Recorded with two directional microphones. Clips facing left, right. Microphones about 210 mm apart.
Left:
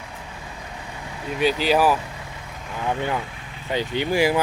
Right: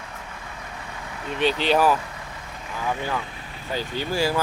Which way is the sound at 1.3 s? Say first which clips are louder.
Left 1 dB; 5° left (ahead or behind).